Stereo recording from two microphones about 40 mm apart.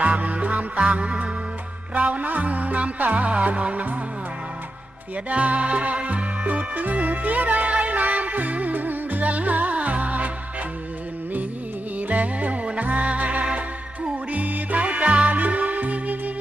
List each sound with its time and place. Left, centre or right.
0.0 s music: right
5.1 s music: right
11.9 s music: right